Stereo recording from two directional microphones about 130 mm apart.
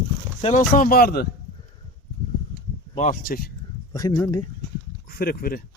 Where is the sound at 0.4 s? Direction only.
80° left.